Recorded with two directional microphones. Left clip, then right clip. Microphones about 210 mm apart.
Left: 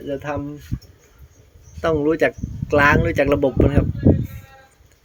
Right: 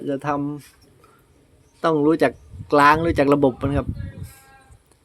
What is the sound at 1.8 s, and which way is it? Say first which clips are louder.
Speech: even; 15° right (ahead or behind).